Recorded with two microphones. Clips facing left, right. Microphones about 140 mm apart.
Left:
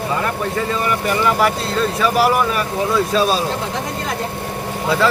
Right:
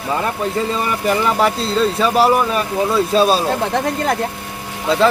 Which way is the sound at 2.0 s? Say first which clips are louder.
Right 1 dB; 25° right (ahead or behind).